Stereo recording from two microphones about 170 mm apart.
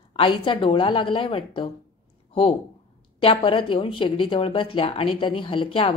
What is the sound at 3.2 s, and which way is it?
Speech, 35° left (ahead or behind).